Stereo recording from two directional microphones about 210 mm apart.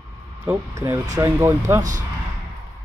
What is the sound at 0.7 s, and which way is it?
Speech, 15° right (ahead or behind).